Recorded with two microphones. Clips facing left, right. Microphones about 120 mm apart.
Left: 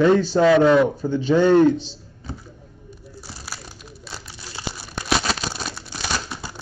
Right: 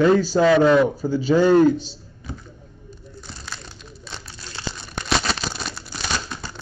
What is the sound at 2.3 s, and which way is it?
Speech, 30° left (ahead or behind).